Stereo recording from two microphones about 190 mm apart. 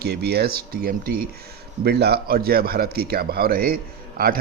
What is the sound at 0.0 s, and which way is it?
A man's voice, 60° right (ahead or behind).